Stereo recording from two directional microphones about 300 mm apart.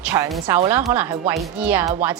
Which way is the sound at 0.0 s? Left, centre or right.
Centre.